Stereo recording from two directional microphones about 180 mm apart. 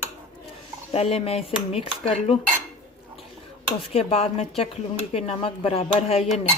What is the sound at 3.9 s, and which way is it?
Speech, 35° left (ahead or behind).